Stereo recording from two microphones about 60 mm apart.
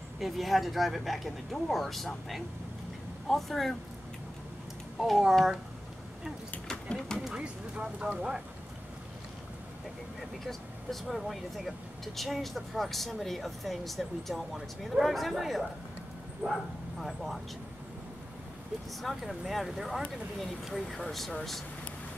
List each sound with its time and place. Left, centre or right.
0.2 s speech: centre
5.0 s speech: centre
6.7 s speech: centre
7.3 s speech: centre
10.4 s speech: centre
16.4 s speech: right
17.0 s speech: centre
18.9 s speech: centre